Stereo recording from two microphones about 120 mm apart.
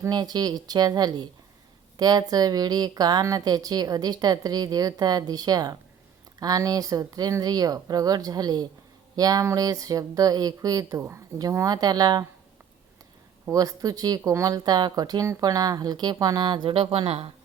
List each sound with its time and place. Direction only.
0.1 s speech: 35° right (ahead or behind)
13.4 s speech: 30° right (ahead or behind)
16.6 s speech: 50° right (ahead or behind)